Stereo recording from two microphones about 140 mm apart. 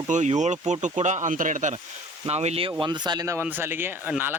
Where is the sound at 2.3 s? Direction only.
50° right (ahead or behind).